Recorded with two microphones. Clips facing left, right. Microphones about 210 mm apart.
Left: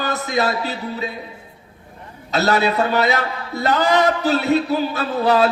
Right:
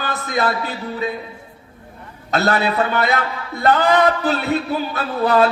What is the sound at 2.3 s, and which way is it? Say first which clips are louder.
A man's voice: even; 55° right (ahead or behind).